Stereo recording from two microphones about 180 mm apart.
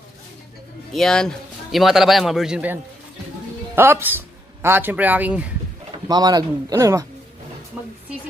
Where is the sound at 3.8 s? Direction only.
15° right (ahead or behind).